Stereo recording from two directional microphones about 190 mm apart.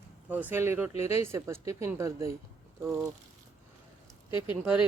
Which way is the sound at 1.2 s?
15° right (ahead or behind).